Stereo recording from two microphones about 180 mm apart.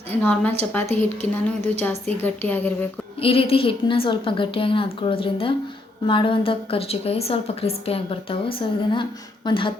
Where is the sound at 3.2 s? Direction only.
30° left (ahead or behind).